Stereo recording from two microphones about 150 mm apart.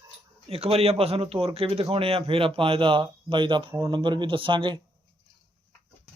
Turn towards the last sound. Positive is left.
turn(degrees=-35)  # may be behind; listen again after turning